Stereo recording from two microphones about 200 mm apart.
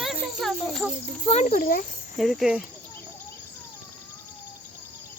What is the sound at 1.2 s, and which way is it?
Speech, 35° left (ahead or behind).